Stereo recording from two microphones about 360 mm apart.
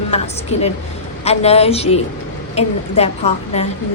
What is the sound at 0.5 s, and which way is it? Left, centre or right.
A woman's voice, centre.